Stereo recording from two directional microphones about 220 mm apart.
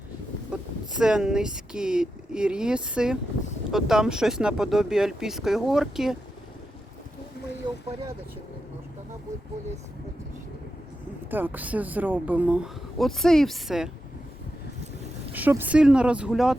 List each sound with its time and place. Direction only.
0.5 s speech: 5° right (ahead or behind)
7.6 s a sound: 20° right (ahead or behind)
11.3 s speech: 10° right (ahead or behind)
15.3 s speech: 10° right (ahead or behind)